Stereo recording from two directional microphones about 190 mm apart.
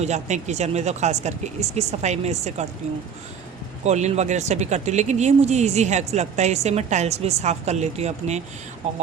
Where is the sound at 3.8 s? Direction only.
35° right (ahead or behind).